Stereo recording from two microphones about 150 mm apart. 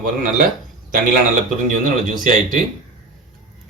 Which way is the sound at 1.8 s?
60° right (ahead or behind).